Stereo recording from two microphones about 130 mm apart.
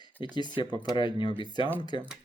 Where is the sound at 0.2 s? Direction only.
35° left (ahead or behind).